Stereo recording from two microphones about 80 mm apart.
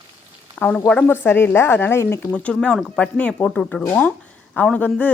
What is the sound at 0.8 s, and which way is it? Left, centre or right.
Speech, centre.